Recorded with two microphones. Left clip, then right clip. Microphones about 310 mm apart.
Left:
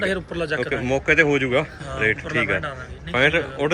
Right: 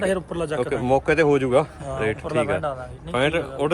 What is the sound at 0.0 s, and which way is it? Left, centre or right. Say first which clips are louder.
A man's voice: even; right.